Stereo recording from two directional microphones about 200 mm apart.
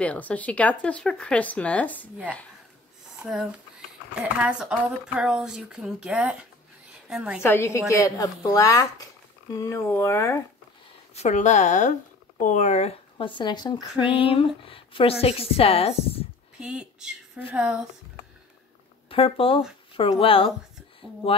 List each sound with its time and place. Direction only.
0.0 s speech: 5° left (ahead or behind)
3.2 s speech: centre (ahead or behind)
7.4 s speech: 10° left (ahead or behind)
11.1 s speech: 35° left (ahead or behind)
16.5 s speech: 5° right (ahead or behind)
19.0 s speech: 25° left (ahead or behind)